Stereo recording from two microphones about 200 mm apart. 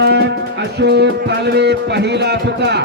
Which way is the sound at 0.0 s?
55° right (ahead or behind).